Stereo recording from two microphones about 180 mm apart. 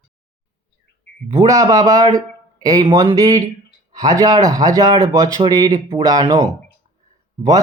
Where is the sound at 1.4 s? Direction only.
20° right (ahead or behind).